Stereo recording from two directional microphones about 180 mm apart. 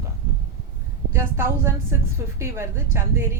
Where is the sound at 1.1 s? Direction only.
15° right (ahead or behind).